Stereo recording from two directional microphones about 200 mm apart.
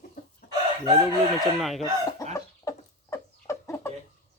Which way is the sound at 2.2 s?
15° left (ahead or behind).